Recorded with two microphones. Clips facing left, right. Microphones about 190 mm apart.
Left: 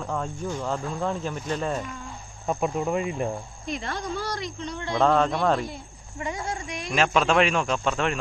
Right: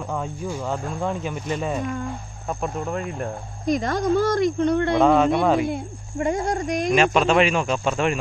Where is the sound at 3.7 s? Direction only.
40° right (ahead or behind); by 5.0 s 60° right (ahead or behind).